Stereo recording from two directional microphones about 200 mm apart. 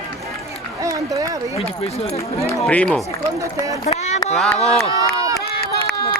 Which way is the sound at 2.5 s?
10° left (ahead or behind).